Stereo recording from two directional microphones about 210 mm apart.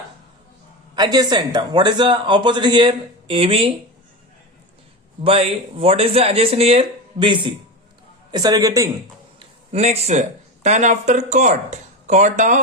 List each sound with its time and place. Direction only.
0.9 s a man's voice: 20° right (ahead or behind)
5.2 s a man's voice: 25° right (ahead or behind)
9.4 s speech: 30° right (ahead or behind)